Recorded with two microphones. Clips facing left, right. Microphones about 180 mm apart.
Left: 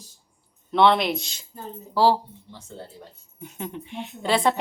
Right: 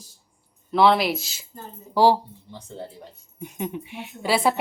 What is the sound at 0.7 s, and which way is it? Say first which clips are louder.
Speech: right 1 dB; centre (ahead or behind).